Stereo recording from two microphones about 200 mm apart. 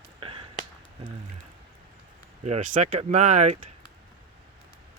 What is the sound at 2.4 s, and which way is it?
Speech, 35° right (ahead or behind).